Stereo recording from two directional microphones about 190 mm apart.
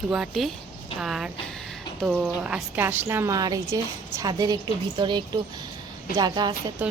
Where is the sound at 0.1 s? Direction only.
Centre (ahead or behind); by 6.5 s 20° right (ahead or behind).